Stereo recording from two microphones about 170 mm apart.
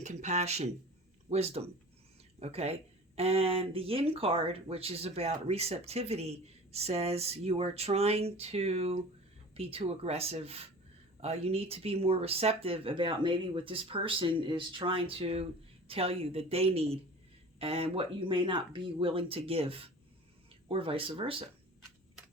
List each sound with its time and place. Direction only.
0.0 s speech: 45° right (ahead or behind)